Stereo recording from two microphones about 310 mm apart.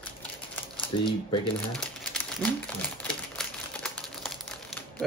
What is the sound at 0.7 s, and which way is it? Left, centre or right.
Speech, centre.